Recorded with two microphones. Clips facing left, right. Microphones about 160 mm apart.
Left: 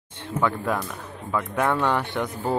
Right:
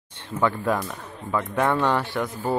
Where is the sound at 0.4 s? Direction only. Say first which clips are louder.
Right 1 dB; centre (ahead or behind).